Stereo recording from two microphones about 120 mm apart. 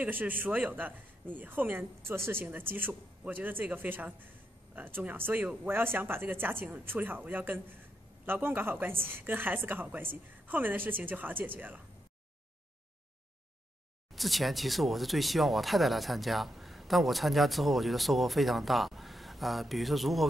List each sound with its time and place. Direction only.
0.0 s speech: 15° right (ahead or behind)
14.1 s speech: centre (ahead or behind)